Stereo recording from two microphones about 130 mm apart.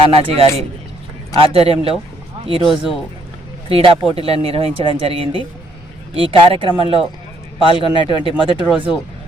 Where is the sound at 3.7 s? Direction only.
45° right (ahead or behind).